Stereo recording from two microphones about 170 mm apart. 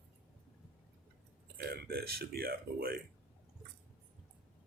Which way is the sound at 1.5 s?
65° right (ahead or behind).